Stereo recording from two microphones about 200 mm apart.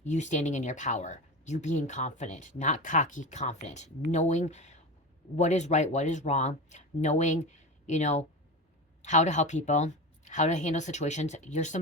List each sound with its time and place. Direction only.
0.0 s speech: 35° left (ahead or behind)